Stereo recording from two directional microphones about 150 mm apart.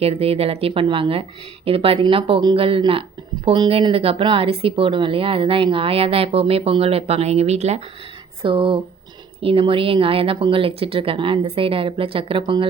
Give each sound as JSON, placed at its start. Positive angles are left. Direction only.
{"t": 0.0, "sound": "speech", "side_deg": -40}
{"t": 8.4, "sound": "speech", "side_deg": -35}